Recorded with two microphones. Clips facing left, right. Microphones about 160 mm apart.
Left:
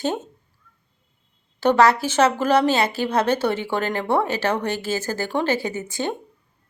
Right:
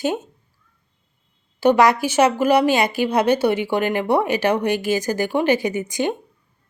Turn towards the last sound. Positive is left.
turn(degrees=-15)  # may be behind; listen again after turning